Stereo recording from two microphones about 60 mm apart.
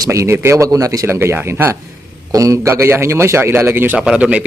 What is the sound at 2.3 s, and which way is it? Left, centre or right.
Speech, right.